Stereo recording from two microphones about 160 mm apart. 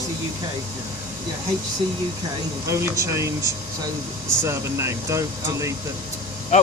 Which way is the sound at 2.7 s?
20° right (ahead or behind).